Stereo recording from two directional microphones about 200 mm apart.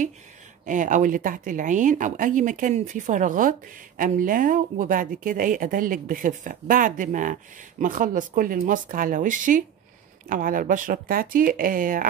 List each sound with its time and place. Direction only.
0.7 s speech: 40° right (ahead or behind)